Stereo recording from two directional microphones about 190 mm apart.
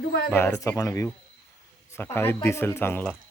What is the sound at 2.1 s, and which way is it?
Speech, 10° left (ahead or behind).